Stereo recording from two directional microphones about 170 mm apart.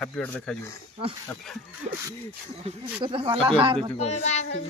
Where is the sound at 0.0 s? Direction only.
10° left (ahead or behind).